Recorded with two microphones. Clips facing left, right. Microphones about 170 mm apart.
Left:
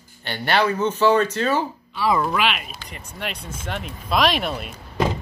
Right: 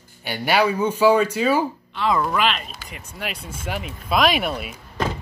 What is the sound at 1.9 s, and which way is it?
Speech, 10° left (ahead or behind).